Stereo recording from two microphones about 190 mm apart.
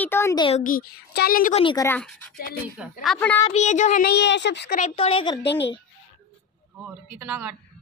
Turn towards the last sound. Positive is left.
turn(degrees=-5)  # may be behind; listen again after turning